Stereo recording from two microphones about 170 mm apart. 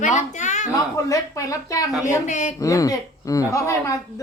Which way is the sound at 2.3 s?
45° left (ahead or behind).